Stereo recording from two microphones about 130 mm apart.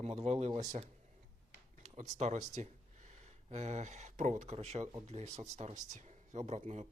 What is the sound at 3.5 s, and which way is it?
Speech, 55° right (ahead or behind).